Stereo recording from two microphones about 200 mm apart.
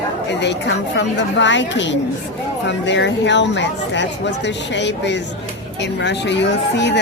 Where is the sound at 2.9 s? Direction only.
65° left (ahead or behind).